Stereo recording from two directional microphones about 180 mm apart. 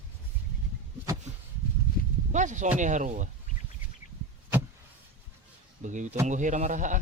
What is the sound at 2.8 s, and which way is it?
Speech, 45° right (ahead or behind).